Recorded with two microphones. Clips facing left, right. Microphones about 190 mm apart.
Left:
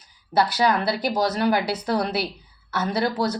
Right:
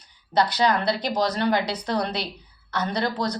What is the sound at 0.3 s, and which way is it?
A woman's voice, 5° left (ahead or behind).